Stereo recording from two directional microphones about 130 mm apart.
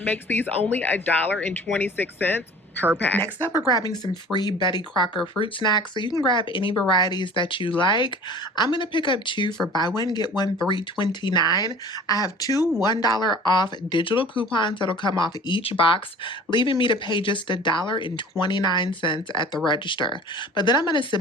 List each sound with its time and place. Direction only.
0.0 s speech: 15° left (ahead or behind)
3.7 s speech: 30° left (ahead or behind)